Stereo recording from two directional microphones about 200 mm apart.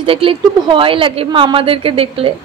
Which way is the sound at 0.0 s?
25° right (ahead or behind).